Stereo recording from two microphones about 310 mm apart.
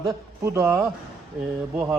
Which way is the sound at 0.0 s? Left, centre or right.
Centre.